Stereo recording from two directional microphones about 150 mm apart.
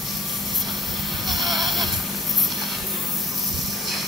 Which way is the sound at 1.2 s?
Centre (ahead or behind).